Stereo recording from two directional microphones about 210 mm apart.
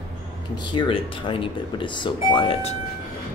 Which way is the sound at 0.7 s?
25° left (ahead or behind).